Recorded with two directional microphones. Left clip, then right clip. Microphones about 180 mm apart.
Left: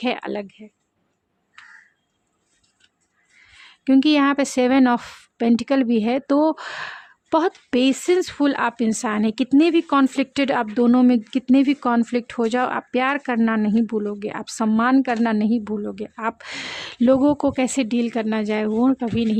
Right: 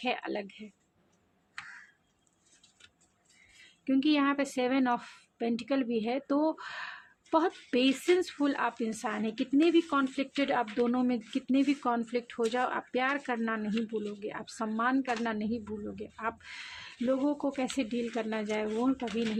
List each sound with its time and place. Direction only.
0.0 s speech: 45° left (ahead or behind)
3.6 s speech: 55° left (ahead or behind)